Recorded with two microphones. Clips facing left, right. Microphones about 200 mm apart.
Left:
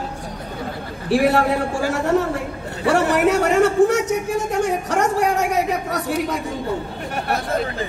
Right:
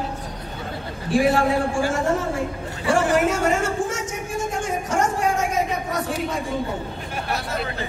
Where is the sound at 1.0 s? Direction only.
65° left (ahead or behind).